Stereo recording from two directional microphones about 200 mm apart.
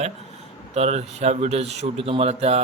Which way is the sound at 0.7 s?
35° right (ahead or behind).